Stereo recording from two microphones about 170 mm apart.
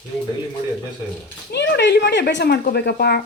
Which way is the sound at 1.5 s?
90° left.